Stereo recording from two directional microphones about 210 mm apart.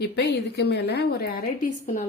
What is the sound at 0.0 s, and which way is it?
A woman's voice, 50° left (ahead or behind).